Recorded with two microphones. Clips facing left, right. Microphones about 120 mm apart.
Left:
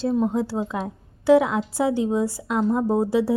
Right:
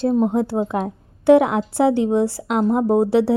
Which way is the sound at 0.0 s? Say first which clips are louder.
Right 4 dB; 50° right (ahead or behind).